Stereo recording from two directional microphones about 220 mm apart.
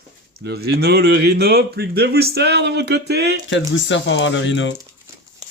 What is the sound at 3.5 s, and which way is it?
Speech, 55° left (ahead or behind).